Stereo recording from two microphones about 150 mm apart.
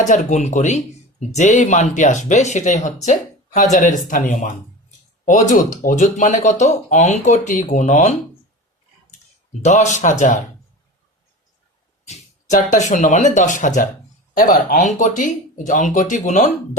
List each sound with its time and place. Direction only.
0.0 s speech: 55° left (ahead or behind)
12.0 s speech: 50° left (ahead or behind)